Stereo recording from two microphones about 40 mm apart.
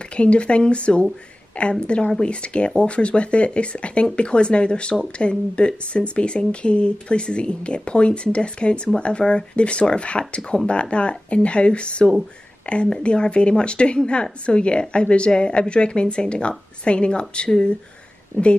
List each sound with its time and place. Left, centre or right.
0.1 s speech: left
18.3 s speech: left